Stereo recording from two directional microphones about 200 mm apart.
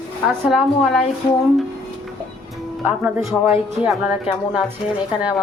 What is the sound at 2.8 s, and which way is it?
A woman's voice, centre (ahead or behind).